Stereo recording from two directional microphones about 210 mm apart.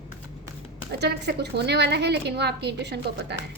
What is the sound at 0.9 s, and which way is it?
A woman's voice, 50° right (ahead or behind).